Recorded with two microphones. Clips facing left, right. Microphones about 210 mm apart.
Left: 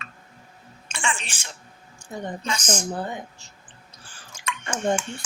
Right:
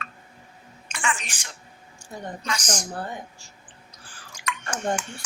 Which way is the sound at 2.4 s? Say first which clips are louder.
Left 2 dB; 25° left (ahead or behind).